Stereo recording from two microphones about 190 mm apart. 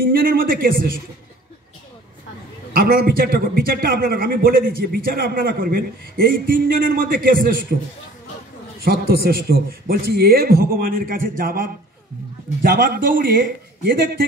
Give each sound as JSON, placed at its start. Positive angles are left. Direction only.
{"t": 0.0, "sound": "a man's voice", "side_deg": -50}
{"t": 2.7, "sound": "a man's voice", "side_deg": -50}
{"t": 8.8, "sound": "a man's voice", "side_deg": -50}